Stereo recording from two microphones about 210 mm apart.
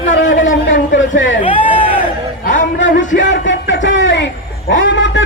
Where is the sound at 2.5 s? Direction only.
60° left (ahead or behind).